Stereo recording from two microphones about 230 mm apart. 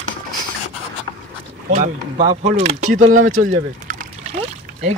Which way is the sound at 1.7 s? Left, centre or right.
Right.